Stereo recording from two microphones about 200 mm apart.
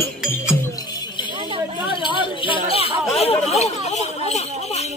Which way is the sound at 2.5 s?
30° right (ahead or behind).